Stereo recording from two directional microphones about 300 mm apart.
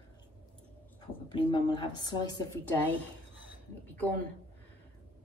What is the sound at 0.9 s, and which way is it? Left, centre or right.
A woman's voice, centre.